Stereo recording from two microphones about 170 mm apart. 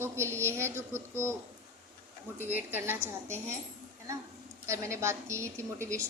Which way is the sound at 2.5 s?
10° right (ahead or behind).